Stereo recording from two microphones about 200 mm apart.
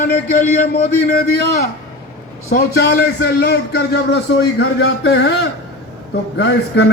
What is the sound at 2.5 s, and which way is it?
A man's voice, 50° left (ahead or behind).